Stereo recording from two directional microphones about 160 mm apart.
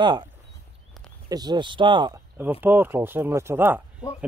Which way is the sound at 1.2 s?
25° right (ahead or behind).